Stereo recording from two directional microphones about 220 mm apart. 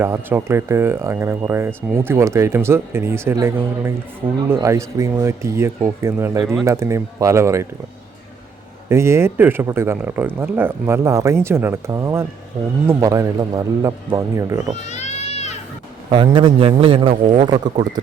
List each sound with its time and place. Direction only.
0.0 s speech: 10° right (ahead or behind)
8.9 s speech: 10° right (ahead or behind)
14.8 s children playing: 30° left (ahead or behind)
16.0 s a man's voice: 20° right (ahead or behind)